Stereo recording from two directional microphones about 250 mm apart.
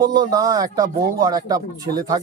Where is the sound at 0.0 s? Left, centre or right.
Centre.